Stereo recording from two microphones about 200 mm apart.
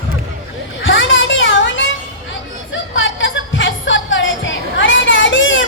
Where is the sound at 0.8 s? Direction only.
70° left (ahead or behind).